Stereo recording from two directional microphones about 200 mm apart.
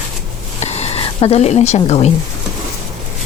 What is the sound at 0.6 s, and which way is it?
Speech, 30° left (ahead or behind).